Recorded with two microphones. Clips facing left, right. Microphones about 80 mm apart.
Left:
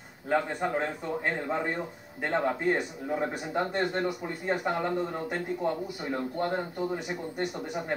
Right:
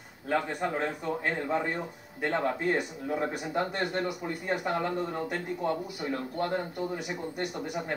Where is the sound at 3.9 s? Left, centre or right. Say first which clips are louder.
Left 1 dB; centre.